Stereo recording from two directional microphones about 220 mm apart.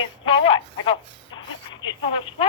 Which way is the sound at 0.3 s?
25° left (ahead or behind).